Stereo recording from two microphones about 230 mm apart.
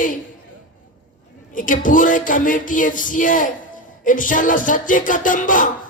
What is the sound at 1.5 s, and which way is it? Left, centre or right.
Music, left.